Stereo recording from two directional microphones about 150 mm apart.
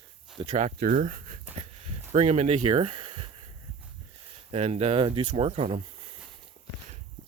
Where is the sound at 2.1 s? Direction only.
50° right (ahead or behind).